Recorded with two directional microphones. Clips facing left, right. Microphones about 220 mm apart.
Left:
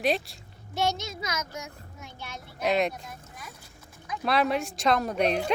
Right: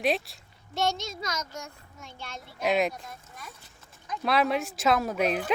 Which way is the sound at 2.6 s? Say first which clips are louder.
Even; centre (ahead or behind).